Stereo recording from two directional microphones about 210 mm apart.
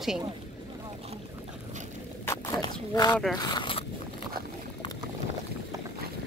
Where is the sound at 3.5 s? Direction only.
25° left (ahead or behind).